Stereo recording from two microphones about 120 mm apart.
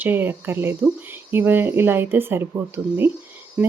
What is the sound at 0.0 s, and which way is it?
Speech, 15° right (ahead or behind).